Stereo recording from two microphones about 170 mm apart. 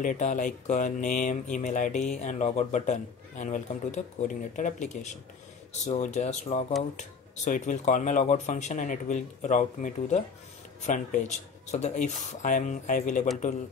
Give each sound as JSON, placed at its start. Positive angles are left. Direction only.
{"t": 0.0, "sound": "speech", "side_deg": 45}